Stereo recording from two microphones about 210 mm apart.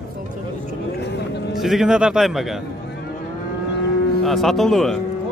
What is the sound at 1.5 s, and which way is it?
Speech, centre (ahead or behind).